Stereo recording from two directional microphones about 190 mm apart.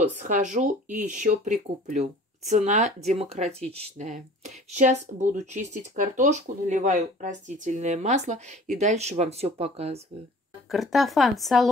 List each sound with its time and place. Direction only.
0.2 s speech: 40° right (ahead or behind)
10.7 s speech: centre (ahead or behind)